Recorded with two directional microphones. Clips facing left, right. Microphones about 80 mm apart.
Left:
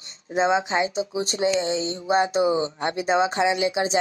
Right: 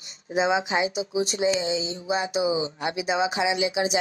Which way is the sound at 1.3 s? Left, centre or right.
Left.